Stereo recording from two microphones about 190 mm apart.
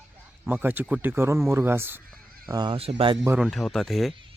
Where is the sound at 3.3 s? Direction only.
5° right (ahead or behind).